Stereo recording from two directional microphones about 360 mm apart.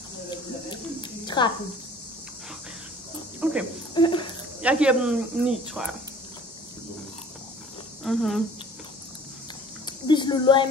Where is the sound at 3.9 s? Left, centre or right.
Centre.